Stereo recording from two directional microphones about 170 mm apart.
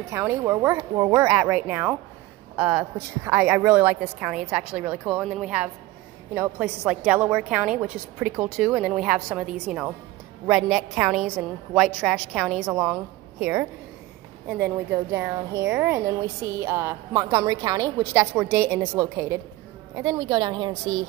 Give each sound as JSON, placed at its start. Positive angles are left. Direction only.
{"t": 0.1, "sound": "a woman's voice", "side_deg": -15}
{"t": 14.9, "sound": "a woman's voice", "side_deg": -15}